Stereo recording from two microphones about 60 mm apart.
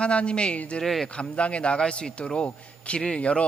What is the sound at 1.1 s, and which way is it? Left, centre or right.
A man's voice, centre.